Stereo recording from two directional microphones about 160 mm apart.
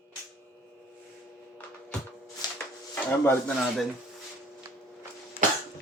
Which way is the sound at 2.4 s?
25° left (ahead or behind).